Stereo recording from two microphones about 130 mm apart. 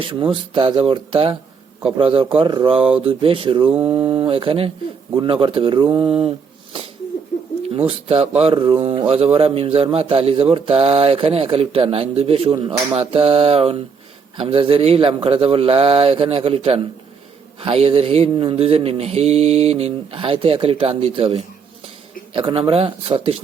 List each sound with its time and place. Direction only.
0.0 s a man's voice: 45° right (ahead or behind)
7.7 s a man's voice: 45° right (ahead or behind)